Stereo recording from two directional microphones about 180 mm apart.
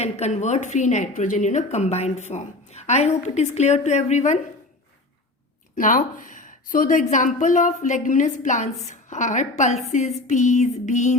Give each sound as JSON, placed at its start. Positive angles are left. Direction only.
{"t": 0.0, "sound": "a woman's voice", "side_deg": 40}
{"t": 5.7, "sound": "a woman's voice", "side_deg": 45}